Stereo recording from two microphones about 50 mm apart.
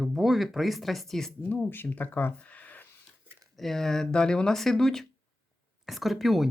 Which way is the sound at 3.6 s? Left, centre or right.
Centre.